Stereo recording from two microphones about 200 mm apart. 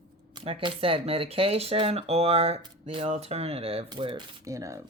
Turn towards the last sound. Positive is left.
turn(degrees=-15)  # may be behind; listen again after turning